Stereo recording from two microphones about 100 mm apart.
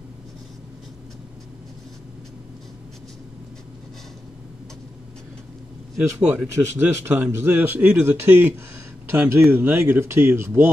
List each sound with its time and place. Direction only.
6.2 s speech: 15° right (ahead or behind)